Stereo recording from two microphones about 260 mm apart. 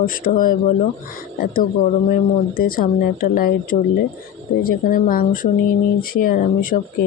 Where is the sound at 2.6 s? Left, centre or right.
Left.